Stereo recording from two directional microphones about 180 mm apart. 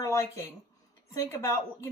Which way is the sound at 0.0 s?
15° left (ahead or behind).